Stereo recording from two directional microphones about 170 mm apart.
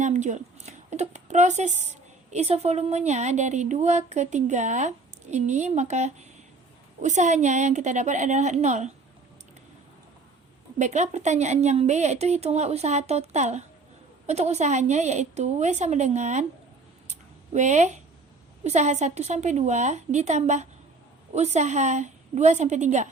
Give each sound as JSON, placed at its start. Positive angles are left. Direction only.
{"t": 0.0, "sound": "a woman's voice", "side_deg": -45}
{"t": 10.8, "sound": "a woman's voice", "side_deg": -45}
{"t": 17.1, "sound": "a sound", "side_deg": -45}
{"t": 18.6, "sound": "a woman's voice", "side_deg": -40}